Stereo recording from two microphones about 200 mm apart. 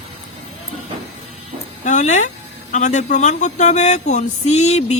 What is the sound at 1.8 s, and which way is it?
Speech, 35° left (ahead or behind).